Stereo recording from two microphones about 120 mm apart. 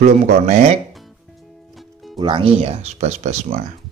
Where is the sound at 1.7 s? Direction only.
Centre (ahead or behind).